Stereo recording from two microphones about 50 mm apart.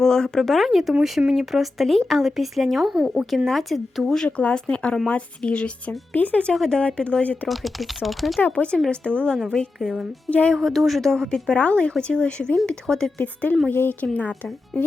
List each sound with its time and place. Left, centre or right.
0.0 s speech: centre
4.3 s speech: left
6.1 s speech: left
6.5 s a woman's voice: centre
6.7 s speech: left
7.4 s speech: centre
8.5 s a woman's voice: left
10.2 s speech: left
10.5 s speech: centre
11.4 s a woman's voice: left
13.1 s speech: left